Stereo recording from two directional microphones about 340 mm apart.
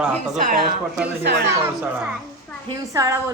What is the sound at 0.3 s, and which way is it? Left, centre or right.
Speech, right.